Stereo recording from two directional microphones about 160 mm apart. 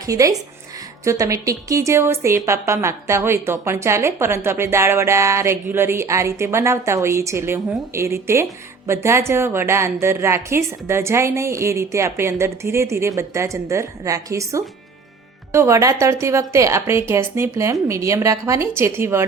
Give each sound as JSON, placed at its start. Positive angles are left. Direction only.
{"t": 0.0, "sound": "a woman's voice", "side_deg": -20}